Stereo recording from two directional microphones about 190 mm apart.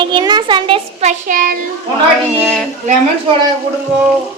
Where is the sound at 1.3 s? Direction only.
45° right (ahead or behind).